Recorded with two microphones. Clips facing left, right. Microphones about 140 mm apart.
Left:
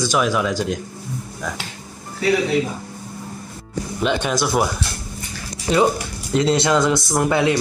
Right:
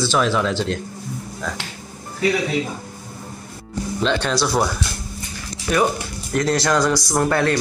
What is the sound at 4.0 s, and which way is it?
Speech, 15° left (ahead or behind).